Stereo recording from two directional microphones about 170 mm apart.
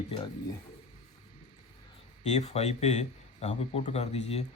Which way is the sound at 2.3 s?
40° left (ahead or behind).